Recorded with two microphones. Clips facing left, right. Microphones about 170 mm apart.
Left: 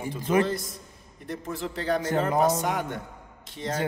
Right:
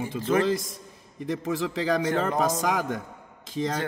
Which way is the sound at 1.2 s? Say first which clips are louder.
Right 5 dB; 90° right.